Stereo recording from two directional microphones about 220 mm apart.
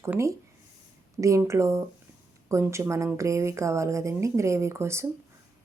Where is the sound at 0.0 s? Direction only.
10° right (ahead or behind).